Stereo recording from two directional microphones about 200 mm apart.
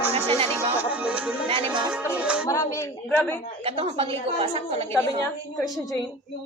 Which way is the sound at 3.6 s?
30° right (ahead or behind).